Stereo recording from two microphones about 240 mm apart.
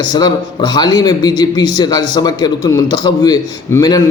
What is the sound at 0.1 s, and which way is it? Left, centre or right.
A man's voice, centre.